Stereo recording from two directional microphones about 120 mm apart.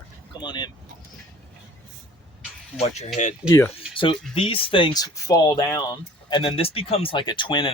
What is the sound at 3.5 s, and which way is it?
Speech, 25° left (ahead or behind).